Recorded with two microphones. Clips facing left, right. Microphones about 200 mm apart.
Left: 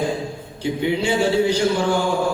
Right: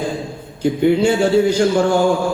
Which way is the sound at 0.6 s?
45° right (ahead or behind).